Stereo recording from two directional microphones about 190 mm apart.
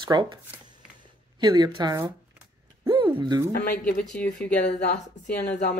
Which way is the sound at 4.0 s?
5° left (ahead or behind).